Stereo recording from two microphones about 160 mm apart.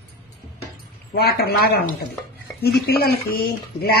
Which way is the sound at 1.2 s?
75° left (ahead or behind).